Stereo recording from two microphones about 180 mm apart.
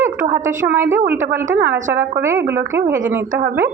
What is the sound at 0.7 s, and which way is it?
Speech, 15° right (ahead or behind).